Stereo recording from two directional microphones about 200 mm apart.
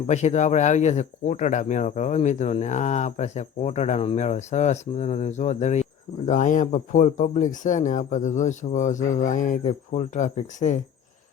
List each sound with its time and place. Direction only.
0.1 s speech: 35° left (ahead or behind)